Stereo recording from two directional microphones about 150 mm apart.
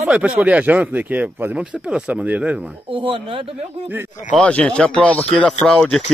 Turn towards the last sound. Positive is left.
turn(degrees=5)  # may be behind; listen again after turning